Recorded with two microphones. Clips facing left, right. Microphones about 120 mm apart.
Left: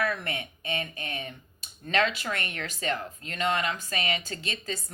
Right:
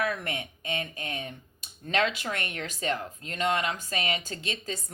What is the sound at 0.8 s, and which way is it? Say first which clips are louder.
Speech: even; 35° right (ahead or behind).